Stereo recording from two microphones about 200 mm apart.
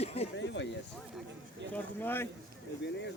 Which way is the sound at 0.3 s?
65° left (ahead or behind).